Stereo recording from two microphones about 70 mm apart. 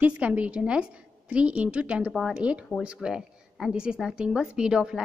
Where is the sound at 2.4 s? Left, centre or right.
Centre.